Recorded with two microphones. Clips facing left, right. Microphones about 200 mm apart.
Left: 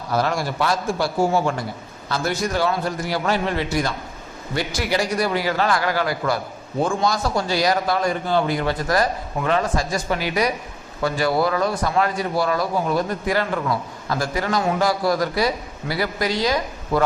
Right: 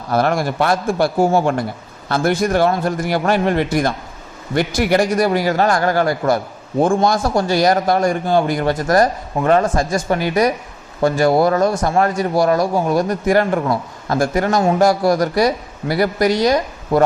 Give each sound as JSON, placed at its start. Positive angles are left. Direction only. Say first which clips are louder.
{"t": 0.1, "sound": "a man's voice", "louder": "right 5 dB", "side_deg": -55}